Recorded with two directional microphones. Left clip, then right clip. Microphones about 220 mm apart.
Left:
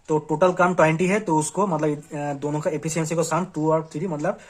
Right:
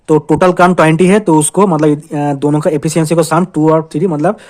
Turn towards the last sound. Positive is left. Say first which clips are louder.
# right 13 dB
turn(degrees=-40)  # may be behind; listen again after turning